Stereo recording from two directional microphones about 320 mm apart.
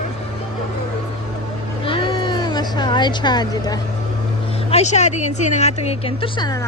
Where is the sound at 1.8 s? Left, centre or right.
Centre.